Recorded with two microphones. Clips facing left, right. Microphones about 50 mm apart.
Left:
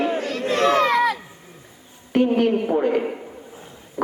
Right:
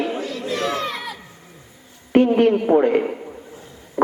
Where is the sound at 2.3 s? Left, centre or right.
Centre.